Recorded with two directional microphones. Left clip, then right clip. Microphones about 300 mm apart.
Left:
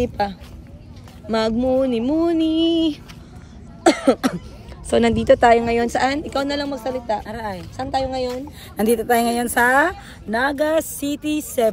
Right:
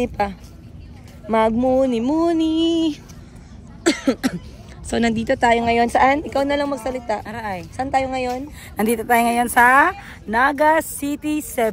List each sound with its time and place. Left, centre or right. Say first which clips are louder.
0.0 s speech: even; centre
3.8 s cough: left 4 dB; centre
4.9 s a woman's voice: left 5 dB; centre
5.5 s speech: even; centre
7.2 s speech: right 1 dB; centre
7.7 s speech: right 2 dB; centre
8.3 s speech: right 2 dB; centre